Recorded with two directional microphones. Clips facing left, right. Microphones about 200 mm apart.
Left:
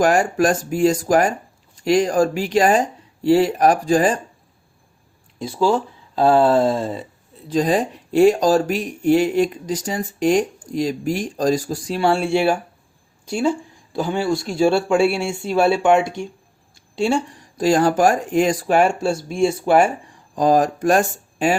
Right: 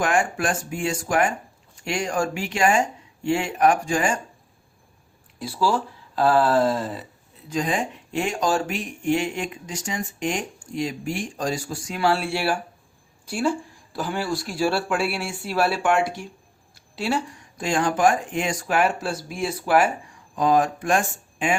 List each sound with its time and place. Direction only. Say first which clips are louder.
0.0 s speech: left 7 dB; 40° left (ahead or behind)
6.1 s speech: left 4 dB; 25° left (ahead or behind)
13.2 s speech: left 4 dB; 5° right (ahead or behind)
13.9 s speech: left 6 dB; 25° left (ahead or behind)
16.0 s speech: left 4 dB; 5° right (ahead or behind)
17.0 s speech: left 6 dB; 25° left (ahead or behind)
20.3 s speech: left 4 dB; 40° left (ahead or behind)